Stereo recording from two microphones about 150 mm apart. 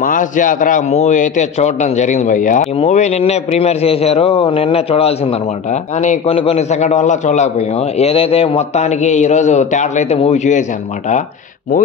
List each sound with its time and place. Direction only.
0.0 s a man's voice: 60° left (ahead or behind)